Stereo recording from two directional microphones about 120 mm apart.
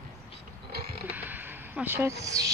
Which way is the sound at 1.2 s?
15° right (ahead or behind).